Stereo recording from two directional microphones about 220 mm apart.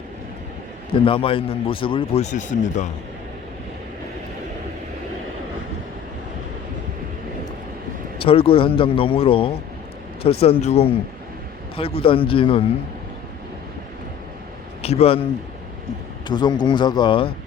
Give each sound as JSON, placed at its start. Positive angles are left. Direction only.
{"t": 0.9, "sound": "speech", "side_deg": 25}
{"t": 8.2, "sound": "speech", "side_deg": 25}
{"t": 14.8, "sound": "a man's voice", "side_deg": 30}
{"t": 16.3, "sound": "speech", "side_deg": 20}